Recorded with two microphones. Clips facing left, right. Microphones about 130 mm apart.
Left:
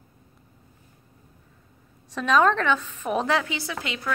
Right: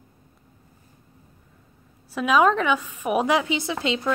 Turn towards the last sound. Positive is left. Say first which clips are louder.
# right 6 dB
turn(degrees=-25)  # may be behind; listen again after turning